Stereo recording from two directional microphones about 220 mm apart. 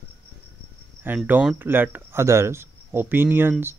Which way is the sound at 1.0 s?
10° right (ahead or behind).